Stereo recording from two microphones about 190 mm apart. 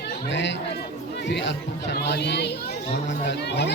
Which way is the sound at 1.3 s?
65° left (ahead or behind).